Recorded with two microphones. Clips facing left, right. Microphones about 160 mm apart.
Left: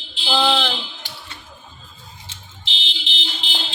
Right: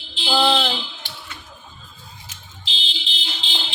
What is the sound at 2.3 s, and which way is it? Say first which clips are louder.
Fire alarm: left 1 dB; 30° left (ahead or behind).